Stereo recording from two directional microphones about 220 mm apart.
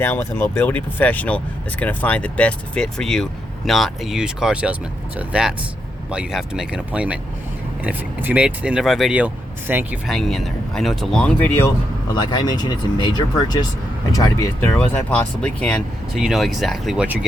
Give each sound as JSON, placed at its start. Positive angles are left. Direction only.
{"t": 0.0, "sound": "speech", "side_deg": 10}